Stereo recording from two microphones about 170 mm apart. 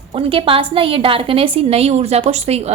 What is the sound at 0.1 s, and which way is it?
A woman's voice, 30° right (ahead or behind).